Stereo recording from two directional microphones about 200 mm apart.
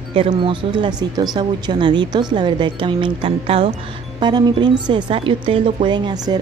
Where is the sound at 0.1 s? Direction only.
25° right (ahead or behind).